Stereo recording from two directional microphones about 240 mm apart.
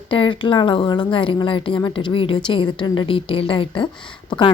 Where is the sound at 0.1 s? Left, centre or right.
Left.